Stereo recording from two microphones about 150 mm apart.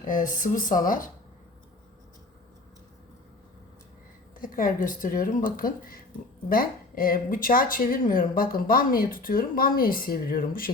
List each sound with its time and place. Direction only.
0.1 s speech: 60° left (ahead or behind)
4.4 s a woman's voice: 65° left (ahead or behind)